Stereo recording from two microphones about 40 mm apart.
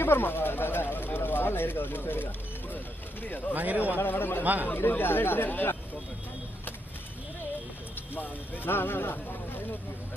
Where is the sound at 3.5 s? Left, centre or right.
Right.